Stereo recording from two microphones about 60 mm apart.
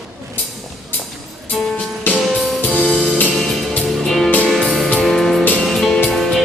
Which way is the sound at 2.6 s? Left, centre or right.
Centre.